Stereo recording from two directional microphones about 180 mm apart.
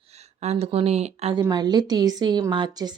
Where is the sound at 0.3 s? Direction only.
35° right (ahead or behind).